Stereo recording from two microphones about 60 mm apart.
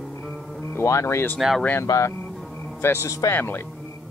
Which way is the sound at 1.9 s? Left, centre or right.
Left.